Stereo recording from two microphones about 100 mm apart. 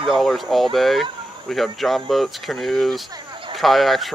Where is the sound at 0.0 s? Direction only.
Centre (ahead or behind).